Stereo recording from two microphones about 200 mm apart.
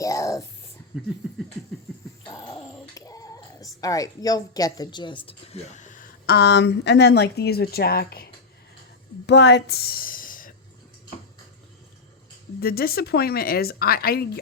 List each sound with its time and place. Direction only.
0.0 s whispering: 15° left (ahead or behind)
0.9 s a sound: 5° right (ahead or behind)
2.2 s speech: 20° left (ahead or behind); by 10.5 s 45° left (ahead or behind)
12.5 s speech: 50° left (ahead or behind)